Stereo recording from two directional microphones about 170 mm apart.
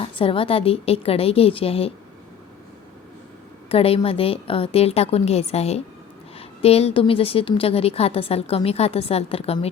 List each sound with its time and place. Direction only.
0.2 s a woman's voice: 30° left (ahead or behind)
3.7 s a woman's voice: 35° left (ahead or behind)